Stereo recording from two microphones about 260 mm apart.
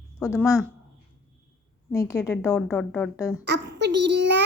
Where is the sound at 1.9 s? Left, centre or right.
Centre.